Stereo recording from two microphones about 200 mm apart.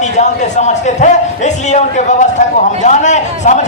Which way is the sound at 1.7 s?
35° left (ahead or behind).